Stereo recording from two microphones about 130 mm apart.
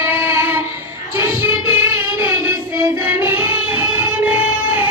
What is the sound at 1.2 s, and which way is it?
Child singing, 15° right (ahead or behind).